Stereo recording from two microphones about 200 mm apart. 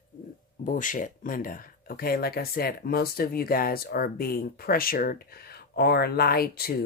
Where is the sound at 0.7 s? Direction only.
40° left (ahead or behind).